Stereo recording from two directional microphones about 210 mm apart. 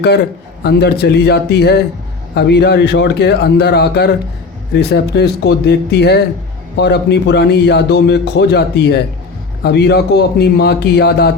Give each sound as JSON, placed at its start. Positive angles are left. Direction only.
{"t": 0.6, "sound": "a man's voice", "side_deg": 50}